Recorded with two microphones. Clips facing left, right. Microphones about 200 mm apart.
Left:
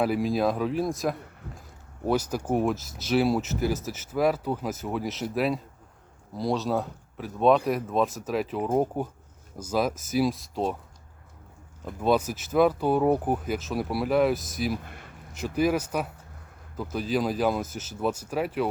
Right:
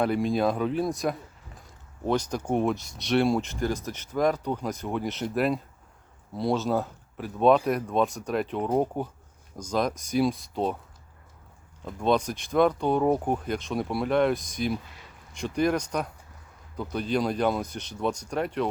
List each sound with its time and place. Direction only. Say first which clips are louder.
0.0 s speech: even; 5° left (ahead or behind)
11.9 s speech: left 1 dB; 5° left (ahead or behind)
14.8 s a sound: left 5 dB; 55° left (ahead or behind)
15.3 s speech: left 1 dB; 5° left (ahead or behind)